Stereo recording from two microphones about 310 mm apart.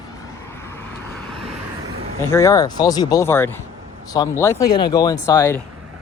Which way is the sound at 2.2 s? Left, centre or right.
Centre.